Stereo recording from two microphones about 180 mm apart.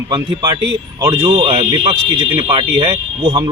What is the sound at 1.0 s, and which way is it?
Speech, 25° right (ahead or behind).